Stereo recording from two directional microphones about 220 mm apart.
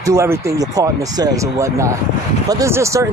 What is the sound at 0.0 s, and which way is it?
Speech, 15° right (ahead or behind).